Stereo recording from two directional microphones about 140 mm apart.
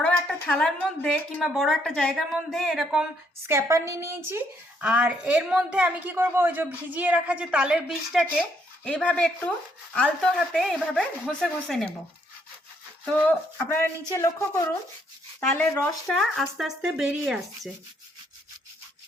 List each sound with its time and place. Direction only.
0.0 s a woman's voice: 10° left (ahead or behind)
3.4 s a woman's voice: 20° right (ahead or behind); by 8.2 s 5° right (ahead or behind)
8.8 s speech: 5° left (ahead or behind)
13.7 s speech: 20° left (ahead or behind)
16.0 s speech: centre (ahead or behind)